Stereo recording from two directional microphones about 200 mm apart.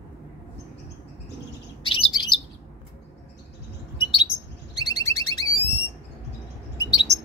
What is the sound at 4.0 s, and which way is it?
Bird, 25° left (ahead or behind).